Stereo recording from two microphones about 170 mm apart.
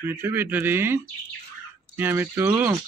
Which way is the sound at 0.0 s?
10° right (ahead or behind).